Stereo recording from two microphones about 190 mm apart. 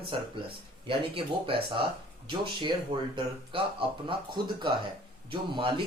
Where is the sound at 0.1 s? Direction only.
25° right (ahead or behind).